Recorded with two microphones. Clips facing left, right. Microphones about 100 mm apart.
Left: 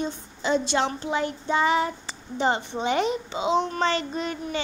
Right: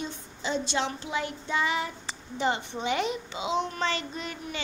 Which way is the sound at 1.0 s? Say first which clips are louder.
Left 5 dB; 35° left (ahead or behind).